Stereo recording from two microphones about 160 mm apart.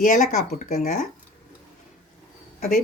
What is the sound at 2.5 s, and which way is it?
Speech, 65° left (ahead or behind).